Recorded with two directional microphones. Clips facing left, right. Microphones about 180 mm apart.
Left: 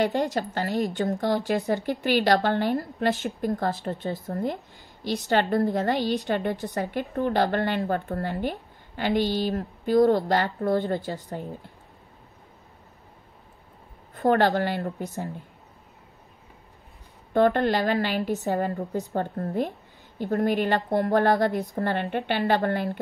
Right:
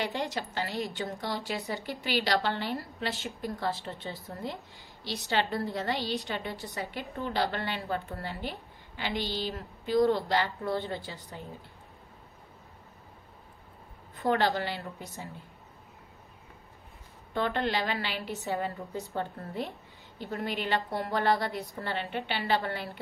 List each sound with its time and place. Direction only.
0.0 s a woman's voice: 45° left (ahead or behind)
14.1 s a woman's voice: 55° left (ahead or behind)
17.3 s a woman's voice: 50° left (ahead or behind)